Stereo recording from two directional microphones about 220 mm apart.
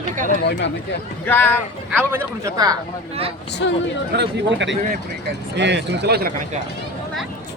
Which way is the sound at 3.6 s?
55° left (ahead or behind).